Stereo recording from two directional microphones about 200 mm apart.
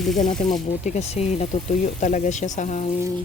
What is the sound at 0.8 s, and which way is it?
Speech, 35° left (ahead or behind).